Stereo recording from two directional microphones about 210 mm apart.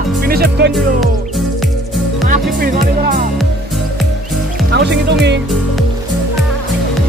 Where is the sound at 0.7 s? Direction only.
Centre (ahead or behind).